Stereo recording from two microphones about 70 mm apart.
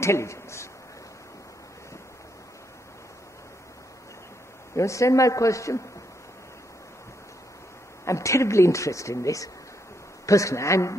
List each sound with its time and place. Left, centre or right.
0.0 s a man's voice: left
4.7 s speech: left
8.0 s speech: left